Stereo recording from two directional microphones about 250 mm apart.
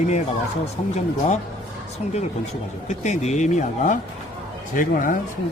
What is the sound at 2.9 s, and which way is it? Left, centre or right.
Speech, left.